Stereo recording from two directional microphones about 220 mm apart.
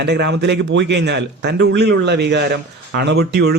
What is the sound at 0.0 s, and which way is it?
A man's voice, 50° right (ahead or behind).